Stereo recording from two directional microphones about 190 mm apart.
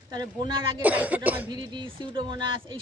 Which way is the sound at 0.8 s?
10° right (ahead or behind).